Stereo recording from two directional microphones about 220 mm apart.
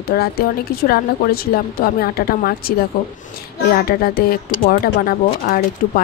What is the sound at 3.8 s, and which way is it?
Speech, 45° left (ahead or behind).